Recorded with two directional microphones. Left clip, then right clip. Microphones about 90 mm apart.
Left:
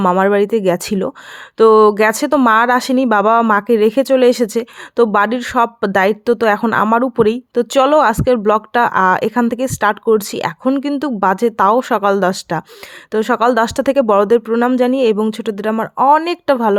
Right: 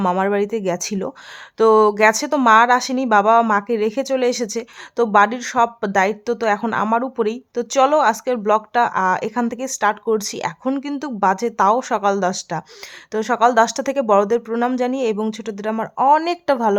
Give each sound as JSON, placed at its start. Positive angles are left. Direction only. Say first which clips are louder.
{"t": 0.2, "sound": "speech", "louder": "left 6 dB", "side_deg": 50}
{"t": 1.5, "sound": "a woman's voice", "louder": "left 5 dB", "side_deg": 35}
{"t": 2.0, "sound": "speech", "louder": "left 3 dB", "side_deg": 45}
{"t": 13.1, "sound": "speech", "louder": "left 3 dB", "side_deg": 40}
{"t": 16.2, "sound": "a woman's voice", "louder": "left 3 dB", "side_deg": 30}